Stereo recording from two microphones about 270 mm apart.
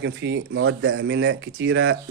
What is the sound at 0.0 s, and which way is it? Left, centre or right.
Speech, right.